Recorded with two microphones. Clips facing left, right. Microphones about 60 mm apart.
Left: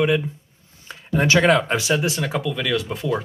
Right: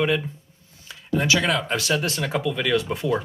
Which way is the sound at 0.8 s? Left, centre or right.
Left.